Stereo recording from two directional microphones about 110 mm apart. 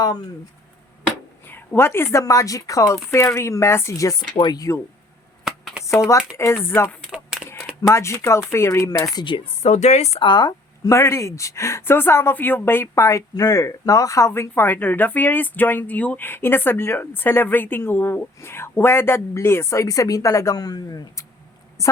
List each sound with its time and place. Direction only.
1.5 s speech: 20° left (ahead or behind)
5.5 s a sound: 5° right (ahead or behind)
6.3 s speech: 25° left (ahead or behind)
7.1 s a sound: 5° right (ahead or behind)
7.8 s speech: 25° left (ahead or behind)
9.6 s a woman's voice: 90° left
10.2 s speech: 45° left (ahead or behind)
10.8 s speech: 25° left (ahead or behind)